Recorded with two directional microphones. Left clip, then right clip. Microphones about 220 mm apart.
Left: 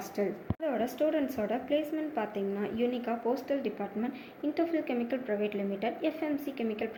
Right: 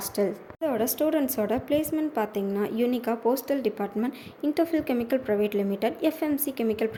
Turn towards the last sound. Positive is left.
turn(degrees=-50)  # may be behind; listen again after turning